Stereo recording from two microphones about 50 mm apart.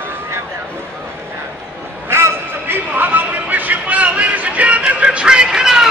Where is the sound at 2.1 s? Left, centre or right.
Right.